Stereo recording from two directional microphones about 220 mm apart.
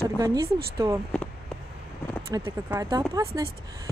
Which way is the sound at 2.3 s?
15° right (ahead or behind).